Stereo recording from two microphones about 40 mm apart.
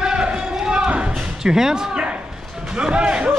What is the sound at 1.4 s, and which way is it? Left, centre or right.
Speech, centre.